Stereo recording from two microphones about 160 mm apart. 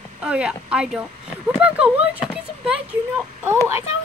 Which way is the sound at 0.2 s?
5° right (ahead or behind).